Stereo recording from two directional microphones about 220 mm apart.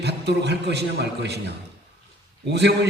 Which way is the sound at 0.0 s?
50° right (ahead or behind).